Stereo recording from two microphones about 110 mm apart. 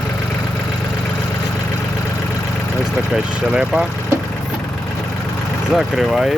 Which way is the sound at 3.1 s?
5° right (ahead or behind).